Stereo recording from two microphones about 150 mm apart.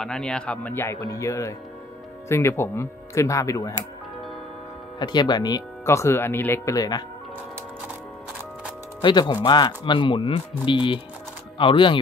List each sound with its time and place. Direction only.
0.0 s speech: 5° left (ahead or behind); by 3.7 s 20° left (ahead or behind)
4.9 s speech: 30° left (ahead or behind)
9.0 s speech: 30° left (ahead or behind)